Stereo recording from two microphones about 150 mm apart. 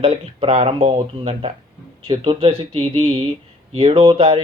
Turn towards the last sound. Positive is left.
turn(degrees=-40)  # may be behind; listen again after turning